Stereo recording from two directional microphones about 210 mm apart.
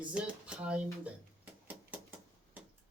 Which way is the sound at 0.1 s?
5° right (ahead or behind).